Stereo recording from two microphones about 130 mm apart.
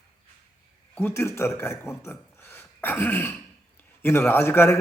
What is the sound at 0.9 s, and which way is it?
A man's voice, 20° left (ahead or behind).